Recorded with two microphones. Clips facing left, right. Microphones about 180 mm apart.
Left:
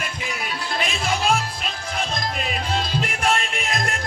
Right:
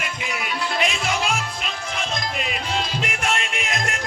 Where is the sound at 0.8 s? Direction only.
35° left (ahead or behind).